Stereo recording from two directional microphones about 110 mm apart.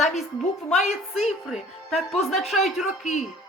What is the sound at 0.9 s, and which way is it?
Speech, 75° left (ahead or behind).